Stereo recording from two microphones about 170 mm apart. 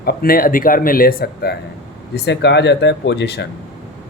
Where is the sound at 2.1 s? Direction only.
85° left.